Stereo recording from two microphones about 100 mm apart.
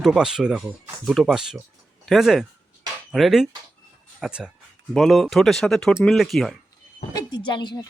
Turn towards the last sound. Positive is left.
turn(degrees=50)  # may be behind; listen again after turning